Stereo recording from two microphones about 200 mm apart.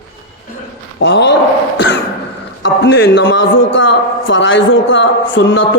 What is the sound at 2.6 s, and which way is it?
A man's voice, 65° left (ahead or behind).